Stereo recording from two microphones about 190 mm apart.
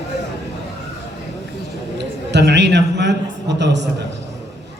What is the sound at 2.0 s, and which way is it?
A man's voice, 65° right (ahead or behind).